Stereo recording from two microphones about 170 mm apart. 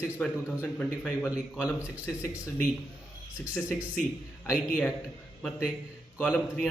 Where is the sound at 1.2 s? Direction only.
5° right (ahead or behind).